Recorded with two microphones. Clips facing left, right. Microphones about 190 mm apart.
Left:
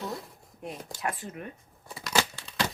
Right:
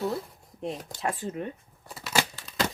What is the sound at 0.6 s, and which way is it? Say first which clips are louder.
Speech: right 3 dB; 25° right (ahead or behind).